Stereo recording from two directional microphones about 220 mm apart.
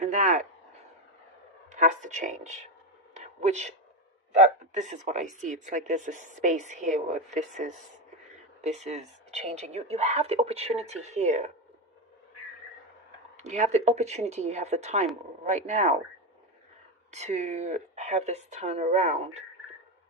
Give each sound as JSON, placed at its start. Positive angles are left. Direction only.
{"t": 0.0, "sound": "speech", "side_deg": -35}
{"t": 1.7, "sound": "speech", "side_deg": -35}
{"t": 3.2, "sound": "a sound", "side_deg": -30}
{"t": 4.7, "sound": "speech", "side_deg": -35}
{"t": 13.3, "sound": "speech", "side_deg": -30}
{"t": 17.1, "sound": "speech", "side_deg": -30}